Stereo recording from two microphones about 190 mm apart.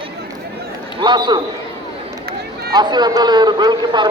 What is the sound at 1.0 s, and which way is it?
Speech, 25° right (ahead or behind).